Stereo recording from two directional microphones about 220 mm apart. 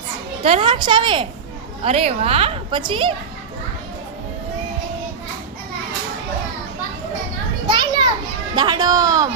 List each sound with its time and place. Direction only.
0.4 s a woman's voice: 25° right (ahead or behind)
7.7 s children playing: 20° right (ahead or behind)
8.5 s speech: 20° right (ahead or behind)